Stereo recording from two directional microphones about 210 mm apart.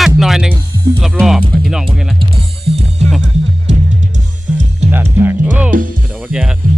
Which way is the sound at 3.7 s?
35° right (ahead or behind).